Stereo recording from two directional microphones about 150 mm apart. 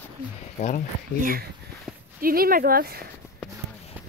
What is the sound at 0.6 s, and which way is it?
Speech, 50° left (ahead or behind).